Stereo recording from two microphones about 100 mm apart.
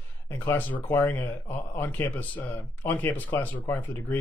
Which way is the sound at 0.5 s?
15° left (ahead or behind).